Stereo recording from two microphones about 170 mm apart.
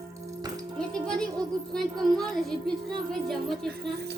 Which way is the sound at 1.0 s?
5° left (ahead or behind).